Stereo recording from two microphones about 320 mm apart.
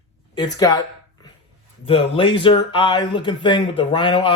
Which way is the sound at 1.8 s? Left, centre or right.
Centre.